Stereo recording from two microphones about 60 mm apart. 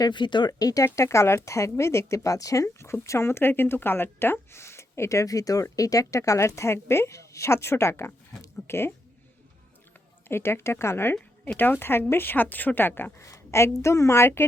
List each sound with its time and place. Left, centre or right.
0.6 s speech: left
0.9 s speech: left
10.2 s speech: left
11.1 s speech: left
13.1 s a sound: left
13.7 s speech: left